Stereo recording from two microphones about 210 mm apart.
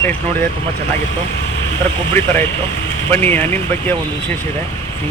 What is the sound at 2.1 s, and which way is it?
Speech, 10° left (ahead or behind).